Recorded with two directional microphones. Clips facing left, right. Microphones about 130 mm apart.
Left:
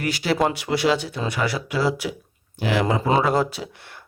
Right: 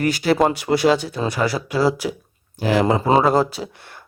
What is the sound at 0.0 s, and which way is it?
Speech, 45° right (ahead or behind).